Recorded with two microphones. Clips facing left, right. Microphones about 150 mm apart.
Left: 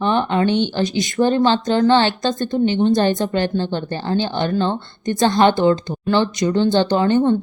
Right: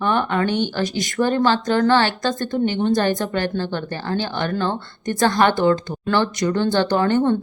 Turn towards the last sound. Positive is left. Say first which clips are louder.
# left 2 dB
turn(degrees=15)  # may be behind; listen again after turning